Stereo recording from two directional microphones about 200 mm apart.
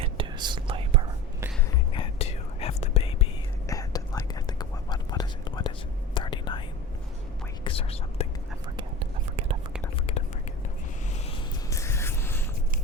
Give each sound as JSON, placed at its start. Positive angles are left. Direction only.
{"t": 0.0, "sound": "whispering", "side_deg": -25}
{"t": 1.9, "sound": "whispering", "side_deg": 30}
{"t": 3.7, "sound": "whispering", "side_deg": 20}
{"t": 7.6, "sound": "whispering", "side_deg": 30}
{"t": 11.7, "sound": "a sound", "side_deg": 15}